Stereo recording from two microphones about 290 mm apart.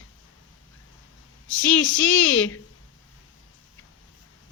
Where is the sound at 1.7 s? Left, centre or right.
Left.